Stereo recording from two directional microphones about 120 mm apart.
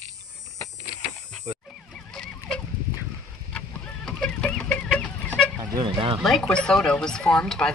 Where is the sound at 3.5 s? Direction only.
10° left (ahead or behind).